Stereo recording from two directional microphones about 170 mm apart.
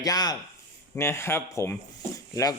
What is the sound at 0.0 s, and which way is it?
Speech, 25° left (ahead or behind).